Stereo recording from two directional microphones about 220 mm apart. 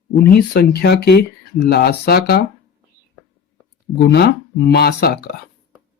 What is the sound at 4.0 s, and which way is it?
Speech, 50° left (ahead or behind).